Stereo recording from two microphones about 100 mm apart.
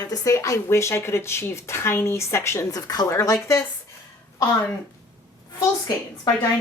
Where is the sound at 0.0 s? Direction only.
35° left (ahead or behind).